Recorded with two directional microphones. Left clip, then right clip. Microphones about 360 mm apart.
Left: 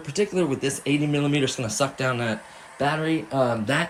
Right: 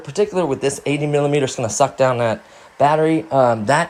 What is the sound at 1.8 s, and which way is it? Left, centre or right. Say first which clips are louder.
Speech: right 10 dB; centre.